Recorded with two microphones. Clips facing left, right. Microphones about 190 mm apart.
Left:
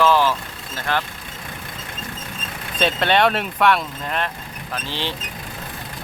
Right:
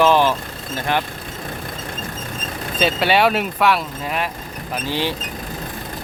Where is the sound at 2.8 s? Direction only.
5° right (ahead or behind).